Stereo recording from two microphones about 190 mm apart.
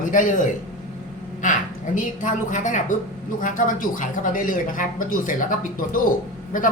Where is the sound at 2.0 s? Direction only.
40° left (ahead or behind).